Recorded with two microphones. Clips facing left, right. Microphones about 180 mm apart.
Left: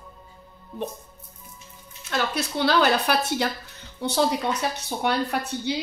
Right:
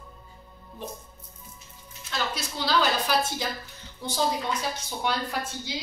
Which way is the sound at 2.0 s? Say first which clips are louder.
Left 5 dB; 60° left (ahead or behind).